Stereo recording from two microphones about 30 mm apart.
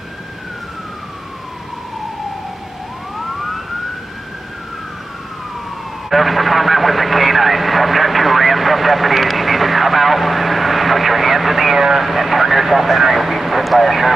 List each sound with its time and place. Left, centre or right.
6.0 s speech: centre